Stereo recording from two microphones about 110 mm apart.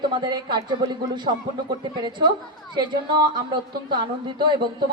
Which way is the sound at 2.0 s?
45° right (ahead or behind).